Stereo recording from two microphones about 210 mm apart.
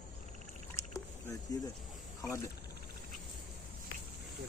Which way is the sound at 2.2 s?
15° left (ahead or behind).